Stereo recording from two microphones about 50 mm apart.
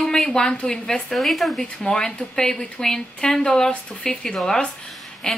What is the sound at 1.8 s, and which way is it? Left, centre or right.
Speech, centre.